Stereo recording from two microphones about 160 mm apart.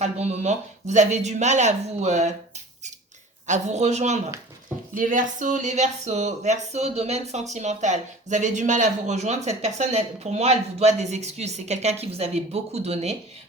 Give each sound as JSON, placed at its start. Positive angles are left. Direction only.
{"t": 0.0, "sound": "speech", "side_deg": -45}
{"t": 3.4, "sound": "speech", "side_deg": -50}
{"t": 4.9, "sound": "speech", "side_deg": -55}